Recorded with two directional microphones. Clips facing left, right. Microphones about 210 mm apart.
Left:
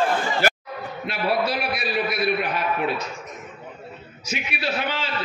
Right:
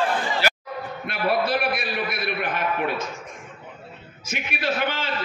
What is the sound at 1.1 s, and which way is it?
A man's voice, 55° right (ahead or behind).